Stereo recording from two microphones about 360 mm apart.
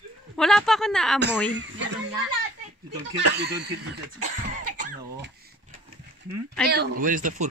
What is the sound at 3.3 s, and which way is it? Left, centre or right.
Speech, right.